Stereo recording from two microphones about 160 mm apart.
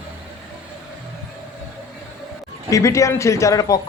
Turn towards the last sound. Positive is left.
turn(degrees=20)  # may be behind; listen again after turning